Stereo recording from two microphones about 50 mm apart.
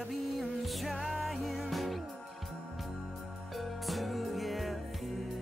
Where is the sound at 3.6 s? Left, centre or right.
Centre.